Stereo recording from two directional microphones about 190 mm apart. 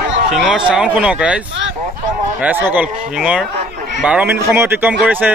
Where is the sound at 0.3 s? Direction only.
5° right (ahead or behind).